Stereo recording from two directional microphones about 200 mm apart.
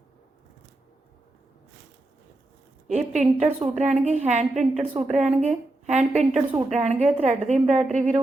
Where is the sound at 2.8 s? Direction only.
35° right (ahead or behind).